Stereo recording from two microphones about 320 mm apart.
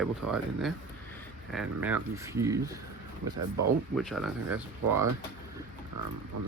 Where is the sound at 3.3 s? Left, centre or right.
Right.